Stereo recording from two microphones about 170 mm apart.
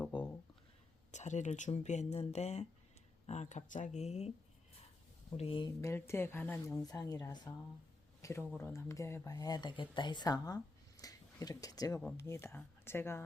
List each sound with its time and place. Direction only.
0.1 s a sound: 30° left (ahead or behind)
1.1 s speech: 45° left (ahead or behind)
5.4 s speech: 30° left (ahead or behind)
5.8 s a woman's voice: 15° left (ahead or behind)
8.2 s a sound: 20° left (ahead or behind)
8.5 s a woman's voice: 15° left (ahead or behind)